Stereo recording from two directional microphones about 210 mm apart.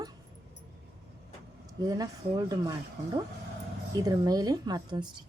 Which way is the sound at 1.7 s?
15° right (ahead or behind).